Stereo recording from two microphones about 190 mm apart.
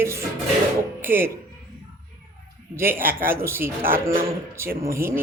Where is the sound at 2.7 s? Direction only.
10° right (ahead or behind).